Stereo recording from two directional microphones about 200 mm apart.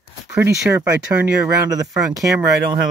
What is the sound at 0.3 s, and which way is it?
Speech, 15° right (ahead or behind).